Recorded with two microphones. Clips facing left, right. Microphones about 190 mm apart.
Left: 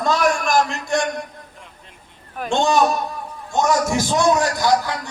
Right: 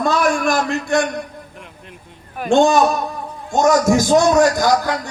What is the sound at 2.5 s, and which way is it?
A man's voice, 50° right (ahead or behind).